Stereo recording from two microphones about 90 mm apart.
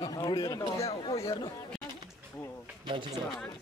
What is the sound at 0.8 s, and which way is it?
Speech, 90° left.